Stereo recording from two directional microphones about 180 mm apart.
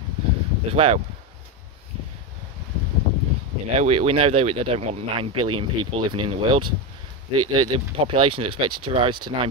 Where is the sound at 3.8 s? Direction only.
35° right (ahead or behind).